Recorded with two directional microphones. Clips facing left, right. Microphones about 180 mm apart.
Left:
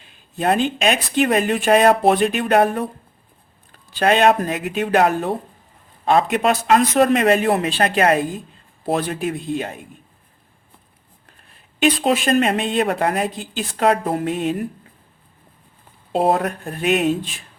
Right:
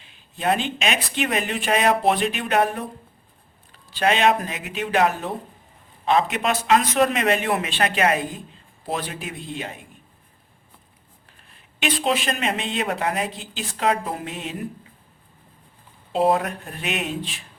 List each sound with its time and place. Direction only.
0.3 s speech: 45° left (ahead or behind)
11.8 s speech: 45° left (ahead or behind)
16.2 s speech: 40° left (ahead or behind)